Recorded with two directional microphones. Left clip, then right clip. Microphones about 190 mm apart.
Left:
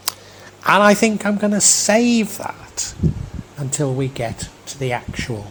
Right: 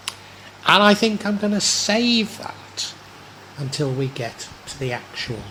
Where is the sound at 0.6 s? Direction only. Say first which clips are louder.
Left 2 dB; 30° left (ahead or behind).